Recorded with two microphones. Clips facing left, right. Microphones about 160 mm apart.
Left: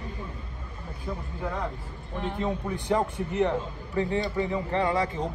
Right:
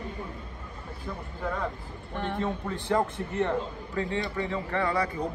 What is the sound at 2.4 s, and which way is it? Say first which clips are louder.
A man's voice: left 1 dB; 15° left (ahead or behind).